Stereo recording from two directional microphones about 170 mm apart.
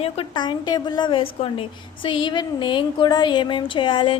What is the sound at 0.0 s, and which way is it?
A woman's voice, 30° left (ahead or behind).